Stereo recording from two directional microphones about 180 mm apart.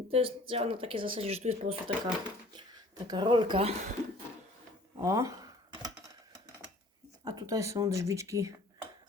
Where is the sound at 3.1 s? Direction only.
25° right (ahead or behind).